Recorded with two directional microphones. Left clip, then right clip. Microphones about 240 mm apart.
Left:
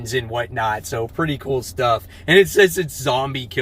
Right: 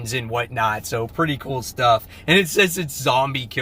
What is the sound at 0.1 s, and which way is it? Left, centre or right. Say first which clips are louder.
Speech: left 1 dB; centre.